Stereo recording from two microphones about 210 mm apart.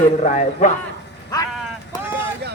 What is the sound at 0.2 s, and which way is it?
Speech, 35° left (ahead or behind).